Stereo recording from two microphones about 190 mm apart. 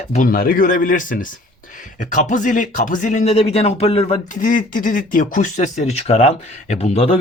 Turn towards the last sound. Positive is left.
turn(degrees=30)  # may be behind; listen again after turning